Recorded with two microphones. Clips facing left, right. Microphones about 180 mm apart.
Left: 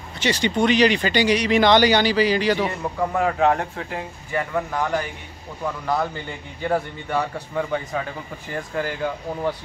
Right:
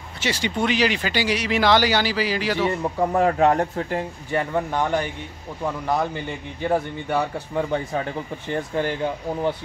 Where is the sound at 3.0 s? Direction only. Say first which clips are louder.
Right 2 dB; 35° right (ahead or behind).